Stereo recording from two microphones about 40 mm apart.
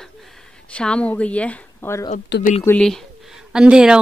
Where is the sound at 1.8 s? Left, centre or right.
Left.